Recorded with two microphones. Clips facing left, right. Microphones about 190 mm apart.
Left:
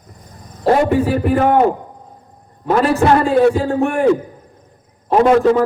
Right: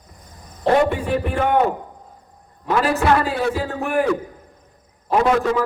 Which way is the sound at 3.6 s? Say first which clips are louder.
Left 8 dB; 30° left (ahead or behind).